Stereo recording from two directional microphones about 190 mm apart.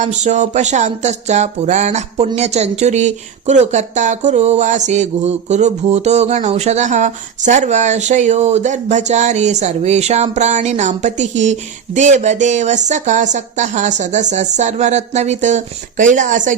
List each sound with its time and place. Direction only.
0.0 s music: 40° right (ahead or behind)